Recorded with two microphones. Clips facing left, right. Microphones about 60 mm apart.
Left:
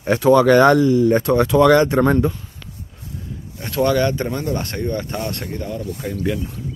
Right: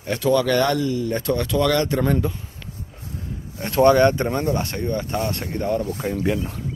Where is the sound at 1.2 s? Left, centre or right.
Left.